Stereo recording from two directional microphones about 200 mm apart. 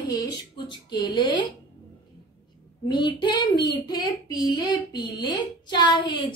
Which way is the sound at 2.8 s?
20° left (ahead or behind).